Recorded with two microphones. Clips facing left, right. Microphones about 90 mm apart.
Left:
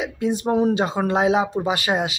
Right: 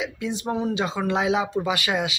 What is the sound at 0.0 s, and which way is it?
Speech, 45° left (ahead or behind).